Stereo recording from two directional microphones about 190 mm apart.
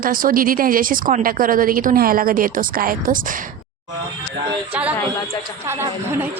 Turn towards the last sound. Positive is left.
turn(degrees=-10)  # may be behind; listen again after turning